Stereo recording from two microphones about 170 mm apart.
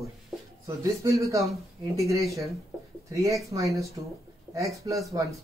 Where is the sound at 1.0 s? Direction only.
20° right (ahead or behind).